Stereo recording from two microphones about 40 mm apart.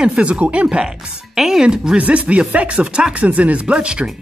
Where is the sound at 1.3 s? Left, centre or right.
Centre.